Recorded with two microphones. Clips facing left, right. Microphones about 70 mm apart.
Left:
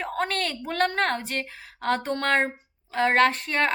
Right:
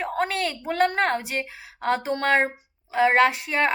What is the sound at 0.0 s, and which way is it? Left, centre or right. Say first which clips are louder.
A woman's voice: right 2 dB; centre.